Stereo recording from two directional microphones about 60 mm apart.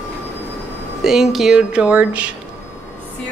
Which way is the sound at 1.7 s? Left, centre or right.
Centre.